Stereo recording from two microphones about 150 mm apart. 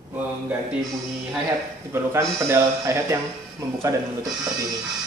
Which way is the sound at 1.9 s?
20° right (ahead or behind).